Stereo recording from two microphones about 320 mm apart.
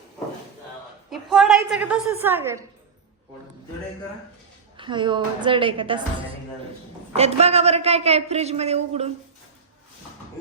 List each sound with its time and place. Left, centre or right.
1.1 s a woman's voice: centre
4.8 s a woman's voice: centre
7.1 s a man's voice: centre